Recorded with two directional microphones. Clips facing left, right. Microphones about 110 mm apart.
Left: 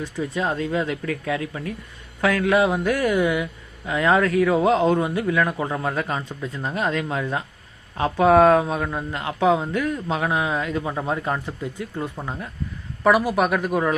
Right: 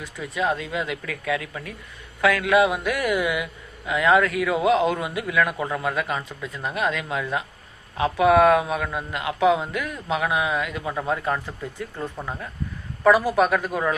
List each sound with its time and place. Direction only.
0.0 s speech: 35° left (ahead or behind)
10.9 s speech: 20° left (ahead or behind)